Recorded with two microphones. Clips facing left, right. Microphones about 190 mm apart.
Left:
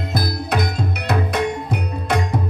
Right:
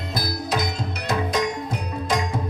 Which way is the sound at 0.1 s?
60° left (ahead or behind).